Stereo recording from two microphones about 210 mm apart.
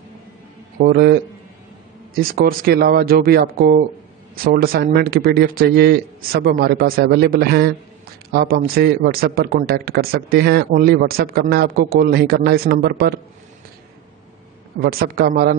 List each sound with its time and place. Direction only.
0.7 s speech: 45° right (ahead or behind)
14.8 s speech: 45° right (ahead or behind)